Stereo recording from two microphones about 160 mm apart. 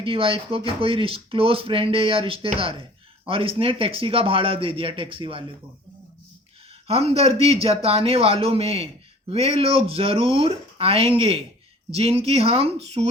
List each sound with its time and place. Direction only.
0.0 s speech: 35° right (ahead or behind)
6.8 s speech: 40° right (ahead or behind)